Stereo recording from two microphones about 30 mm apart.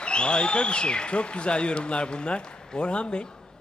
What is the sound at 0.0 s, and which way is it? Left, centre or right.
A man's voice, left.